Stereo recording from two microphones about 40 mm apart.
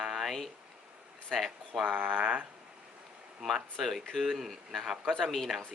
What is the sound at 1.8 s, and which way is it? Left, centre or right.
Speech, right.